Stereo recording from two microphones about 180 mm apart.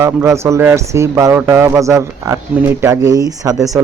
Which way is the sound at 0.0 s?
15° right (ahead or behind).